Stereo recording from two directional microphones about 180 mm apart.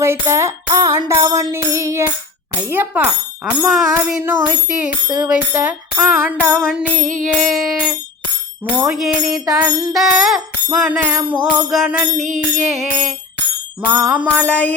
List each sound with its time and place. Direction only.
0.0 s bicycle bell: 15° right (ahead or behind)
5.0 s bicycle bell: 20° right (ahead or behind)
5.3 s bicycle bell: 5° right (ahead or behind)
6.5 s music: 5° left (ahead or behind)
8.8 s music: 5° right (ahead or behind)
13.8 s bicycle bell: 10° right (ahead or behind)
14.3 s a sound: 5° left (ahead or behind)